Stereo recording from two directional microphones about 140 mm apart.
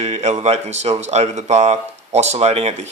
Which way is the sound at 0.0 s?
55° right (ahead or behind).